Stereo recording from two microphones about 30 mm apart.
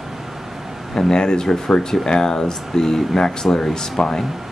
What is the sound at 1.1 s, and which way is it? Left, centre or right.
Speech, left.